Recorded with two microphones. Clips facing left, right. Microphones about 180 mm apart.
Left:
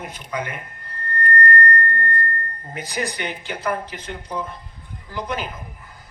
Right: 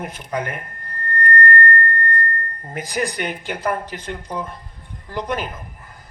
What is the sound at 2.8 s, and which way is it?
A man's voice, 45° right (ahead or behind).